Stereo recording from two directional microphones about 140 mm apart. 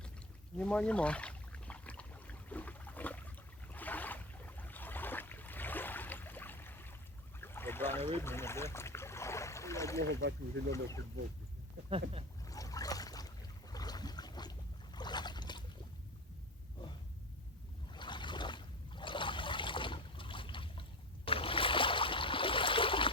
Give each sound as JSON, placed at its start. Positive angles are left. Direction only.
{"t": 0.6, "sound": "a sound", "side_deg": 10}
{"t": 7.4, "sound": "boat", "side_deg": 15}
{"t": 11.9, "sound": "speech", "side_deg": -45}
{"t": 12.5, "sound": "boat", "side_deg": 25}
{"t": 17.9, "sound": "trickle", "side_deg": 35}
{"t": 21.2, "sound": "a sound", "side_deg": 40}